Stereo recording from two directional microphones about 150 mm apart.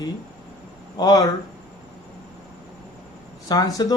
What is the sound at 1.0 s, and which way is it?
Speech, 25° left (ahead or behind).